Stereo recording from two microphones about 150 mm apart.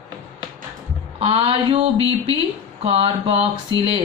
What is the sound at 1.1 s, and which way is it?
A woman's voice, 40° right (ahead or behind).